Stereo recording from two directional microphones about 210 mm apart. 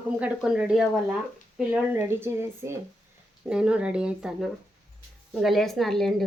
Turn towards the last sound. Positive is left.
turn(degrees=0)  # may be behind; listen again after turning